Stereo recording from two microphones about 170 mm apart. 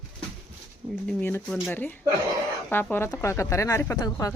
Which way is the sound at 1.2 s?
10° left (ahead or behind).